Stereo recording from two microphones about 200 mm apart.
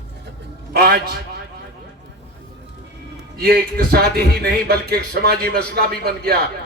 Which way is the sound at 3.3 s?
50° right (ahead or behind).